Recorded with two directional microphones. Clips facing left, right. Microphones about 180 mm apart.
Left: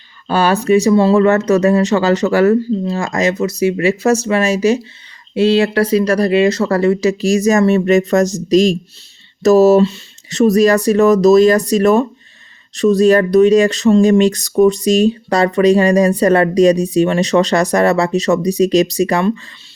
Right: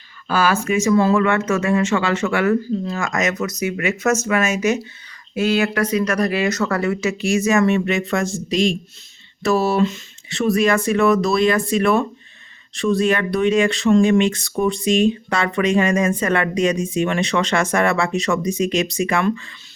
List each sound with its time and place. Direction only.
0.3 s speech: 35° left (ahead or behind)